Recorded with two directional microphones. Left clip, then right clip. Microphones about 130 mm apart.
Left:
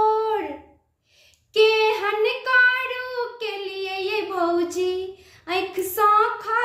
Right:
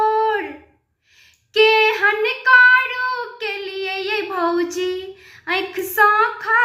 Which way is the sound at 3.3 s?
45° left (ahead or behind).